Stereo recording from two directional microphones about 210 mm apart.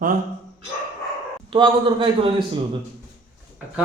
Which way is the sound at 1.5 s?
25° right (ahead or behind).